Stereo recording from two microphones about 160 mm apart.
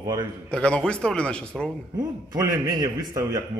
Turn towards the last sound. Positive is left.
turn(degrees=-20)  # may be behind; listen again after turning